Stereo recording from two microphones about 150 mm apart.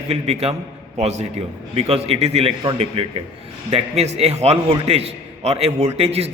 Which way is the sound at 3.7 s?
45° right (ahead or behind).